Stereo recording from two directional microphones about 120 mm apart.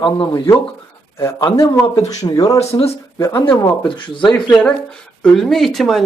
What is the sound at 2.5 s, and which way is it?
Speech, 60° left (ahead or behind).